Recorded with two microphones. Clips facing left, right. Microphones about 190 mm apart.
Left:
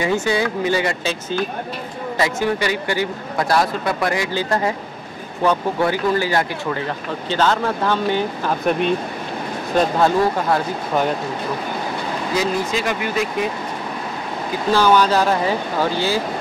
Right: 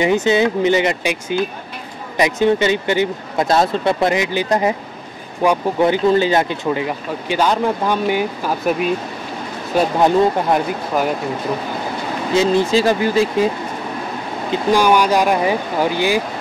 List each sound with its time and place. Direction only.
0.0 s speech: 20° right (ahead or behind)
9.8 s speech: 15° right (ahead or behind)
12.4 s speech: 30° right (ahead or behind)
14.5 s speech: 15° right (ahead or behind)